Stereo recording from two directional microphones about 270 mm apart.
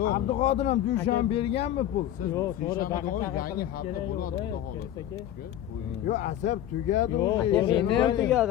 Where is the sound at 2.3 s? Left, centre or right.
Centre.